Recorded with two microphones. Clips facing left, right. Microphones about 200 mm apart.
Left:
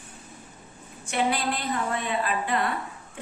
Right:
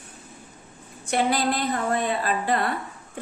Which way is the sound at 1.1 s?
40° right (ahead or behind).